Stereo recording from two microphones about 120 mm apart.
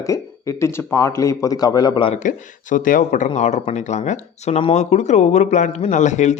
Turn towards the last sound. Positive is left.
turn(degrees=80)